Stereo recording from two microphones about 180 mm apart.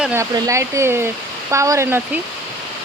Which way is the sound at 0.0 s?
10° right (ahead or behind).